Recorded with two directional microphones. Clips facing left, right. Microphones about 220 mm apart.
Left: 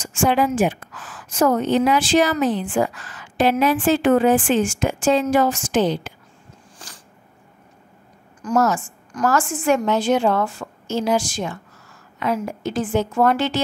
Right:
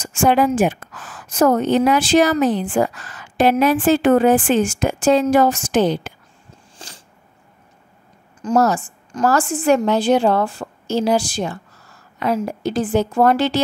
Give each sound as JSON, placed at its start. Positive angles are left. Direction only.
{"t": 0.0, "sound": "a woman's voice", "side_deg": -40}
{"t": 6.8, "sound": "a sound", "side_deg": -25}
{"t": 8.4, "sound": "a woman's voice", "side_deg": -30}